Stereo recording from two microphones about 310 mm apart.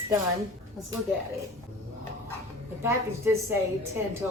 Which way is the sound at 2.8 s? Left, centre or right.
Centre.